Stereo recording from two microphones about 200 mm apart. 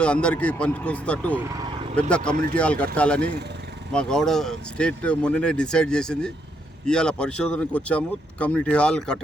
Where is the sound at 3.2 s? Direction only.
55° right (ahead or behind).